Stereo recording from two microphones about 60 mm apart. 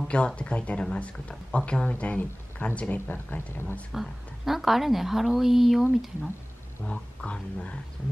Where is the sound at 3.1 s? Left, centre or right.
Left.